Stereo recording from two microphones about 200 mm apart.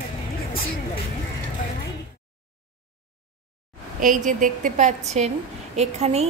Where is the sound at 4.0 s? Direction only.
40° right (ahead or behind).